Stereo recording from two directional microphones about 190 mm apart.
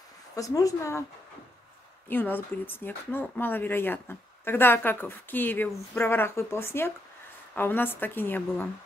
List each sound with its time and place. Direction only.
0.4 s speech: 20° left (ahead or behind)
2.0 s speech: 10° left (ahead or behind)